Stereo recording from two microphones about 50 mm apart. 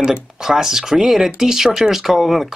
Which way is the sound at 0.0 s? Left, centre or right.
Centre.